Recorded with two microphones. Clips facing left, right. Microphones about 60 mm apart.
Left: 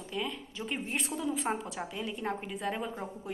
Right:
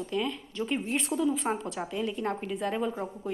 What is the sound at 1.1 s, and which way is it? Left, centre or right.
Speech, right.